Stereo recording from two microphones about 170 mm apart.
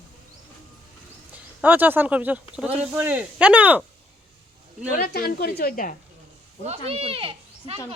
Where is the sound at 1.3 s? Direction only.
10° right (ahead or behind).